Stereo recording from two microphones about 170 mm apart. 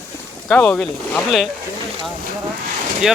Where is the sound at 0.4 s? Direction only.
10° left (ahead or behind).